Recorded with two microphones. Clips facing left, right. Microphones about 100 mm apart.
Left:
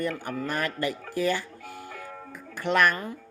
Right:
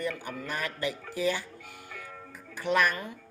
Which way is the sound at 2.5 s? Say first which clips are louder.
Left 3 dB; 60° left (ahead or behind).